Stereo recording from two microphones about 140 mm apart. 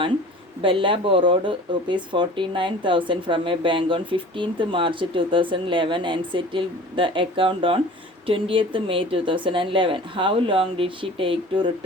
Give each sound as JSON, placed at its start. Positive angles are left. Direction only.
{"t": 0.6, "sound": "a woman's voice", "side_deg": -35}